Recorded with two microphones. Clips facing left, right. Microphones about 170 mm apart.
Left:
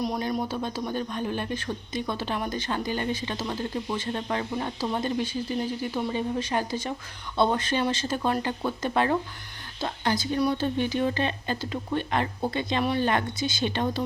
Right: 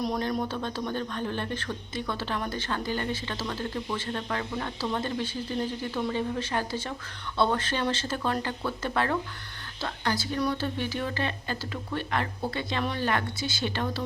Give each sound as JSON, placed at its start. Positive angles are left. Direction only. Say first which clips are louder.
{"t": 0.0, "sound": "speech", "louder": "left 1 dB", "side_deg": 5}